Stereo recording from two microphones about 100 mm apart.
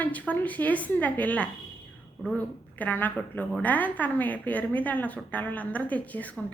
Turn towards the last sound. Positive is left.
turn(degrees=15)  # may be behind; listen again after turning